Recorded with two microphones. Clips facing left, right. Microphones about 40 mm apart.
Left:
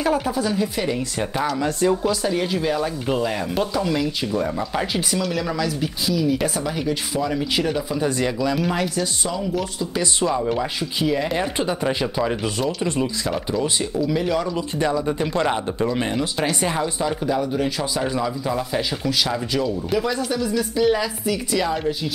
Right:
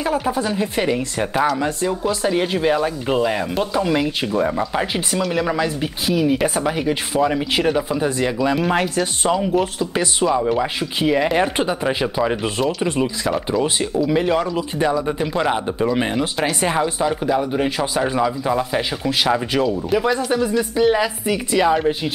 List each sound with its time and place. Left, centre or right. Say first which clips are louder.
0.0 s speech: even; centre
0.3 s speech: right 1 dB; right
7.9 s speech: right 2 dB; centre; by 10.0 s right
10.2 s speech: right 4 dB; centre
10.8 s speech: right 4 dB; right
11.6 s speech: right 2 dB; centre
14.5 s speech: right 2 dB; centre; by 20.5 s right
20.5 s speech: right 1 dB; right